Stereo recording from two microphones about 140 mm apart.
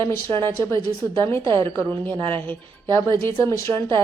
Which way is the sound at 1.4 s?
35° right (ahead or behind).